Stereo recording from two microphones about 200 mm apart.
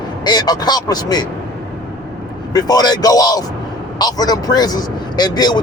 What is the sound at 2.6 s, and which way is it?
A man's voice, 20° left (ahead or behind).